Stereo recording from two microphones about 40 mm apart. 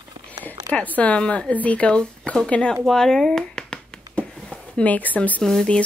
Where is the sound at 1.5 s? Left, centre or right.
Left.